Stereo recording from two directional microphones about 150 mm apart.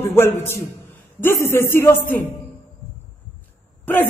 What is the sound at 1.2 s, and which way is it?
Speech, 15° left (ahead or behind).